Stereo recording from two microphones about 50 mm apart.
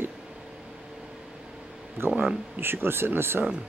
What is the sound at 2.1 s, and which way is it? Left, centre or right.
Speech, centre.